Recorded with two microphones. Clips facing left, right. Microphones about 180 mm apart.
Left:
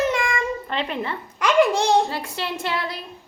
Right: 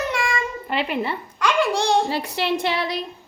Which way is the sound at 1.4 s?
20° left (ahead or behind).